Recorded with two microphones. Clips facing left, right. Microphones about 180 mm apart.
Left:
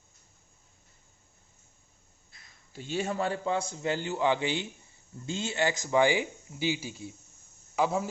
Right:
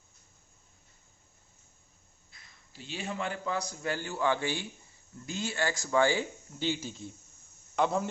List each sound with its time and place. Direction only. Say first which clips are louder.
2.7 s a man's voice: left 6 dB; 45° left (ahead or behind); by 8.0 s 5° left (ahead or behind)